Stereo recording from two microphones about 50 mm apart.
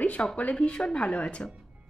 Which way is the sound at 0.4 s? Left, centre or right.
Left.